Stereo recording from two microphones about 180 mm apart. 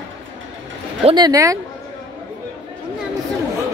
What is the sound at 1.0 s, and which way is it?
Speech, 20° right (ahead or behind).